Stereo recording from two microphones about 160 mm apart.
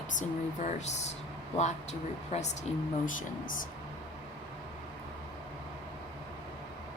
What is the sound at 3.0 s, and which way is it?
Speech, 55° left (ahead or behind).